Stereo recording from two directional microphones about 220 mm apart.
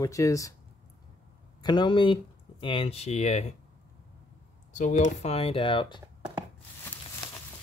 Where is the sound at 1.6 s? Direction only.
20° left (ahead or behind).